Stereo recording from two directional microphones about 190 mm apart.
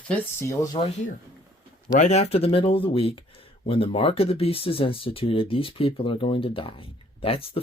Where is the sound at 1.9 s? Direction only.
35° left (ahead or behind).